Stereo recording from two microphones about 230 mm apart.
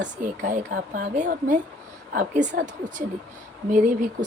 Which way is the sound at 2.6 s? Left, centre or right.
Right.